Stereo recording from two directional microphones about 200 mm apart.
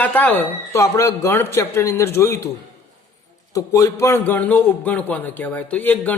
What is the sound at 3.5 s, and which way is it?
A man's voice, 15° left (ahead or behind).